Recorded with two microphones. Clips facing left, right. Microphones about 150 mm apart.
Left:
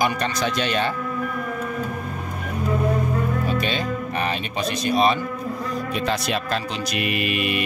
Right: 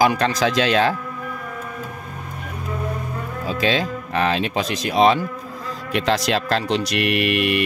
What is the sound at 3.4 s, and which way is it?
Speech, 90° right.